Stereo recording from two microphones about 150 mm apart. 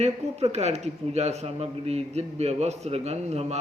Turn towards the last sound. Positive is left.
turn(degrees=-45)  # may be behind; listen again after turning